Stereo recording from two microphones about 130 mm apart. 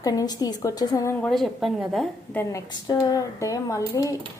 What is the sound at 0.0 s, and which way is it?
Speech, 30° left (ahead or behind).